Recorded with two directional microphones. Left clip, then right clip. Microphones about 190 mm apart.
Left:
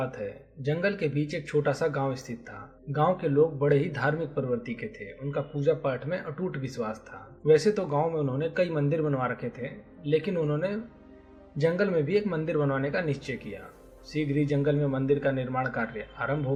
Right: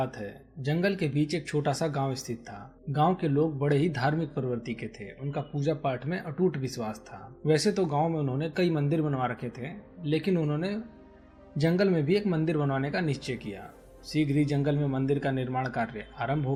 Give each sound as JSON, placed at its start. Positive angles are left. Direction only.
{"t": 0.0, "sound": "a man's voice", "side_deg": -40}